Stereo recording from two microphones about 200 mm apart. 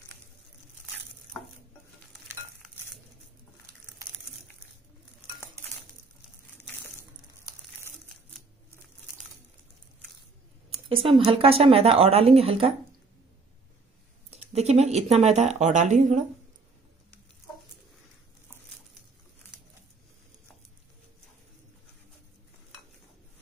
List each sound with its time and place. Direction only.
10.7 s speech: 25° right (ahead or behind)
14.3 s speech: 30° right (ahead or behind)